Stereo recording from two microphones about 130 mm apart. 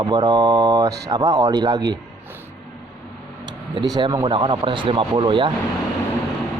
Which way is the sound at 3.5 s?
35° right (ahead or behind).